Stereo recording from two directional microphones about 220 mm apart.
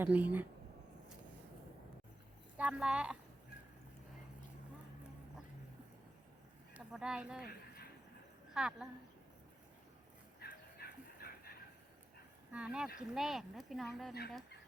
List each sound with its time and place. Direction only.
0.0 s speech: 5° right (ahead or behind)
2.6 s speech: 5° right (ahead or behind)
6.7 s speech: 5° right (ahead or behind)
7.4 s a sound: 45° left (ahead or behind)
8.5 s speech: 5° right (ahead or behind)
10.4 s dog: 45° left (ahead or behind)
12.5 s speech: 5° right (ahead or behind)